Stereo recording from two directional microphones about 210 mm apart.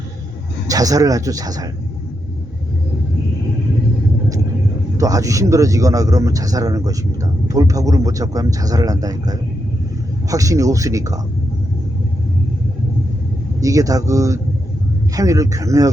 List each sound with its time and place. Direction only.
0.7 s a man's voice: 15° right (ahead or behind)
4.9 s a man's voice: 15° right (ahead or behind)
13.6 s a man's voice: 15° right (ahead or behind)